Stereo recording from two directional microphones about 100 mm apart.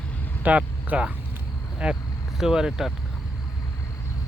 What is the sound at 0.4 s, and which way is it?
Speech, 15° right (ahead or behind).